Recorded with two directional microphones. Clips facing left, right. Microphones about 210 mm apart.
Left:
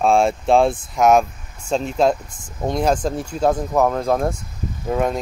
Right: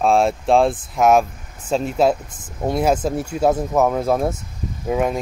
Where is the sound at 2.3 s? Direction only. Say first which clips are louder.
Right 1 dB; 20° right (ahead or behind).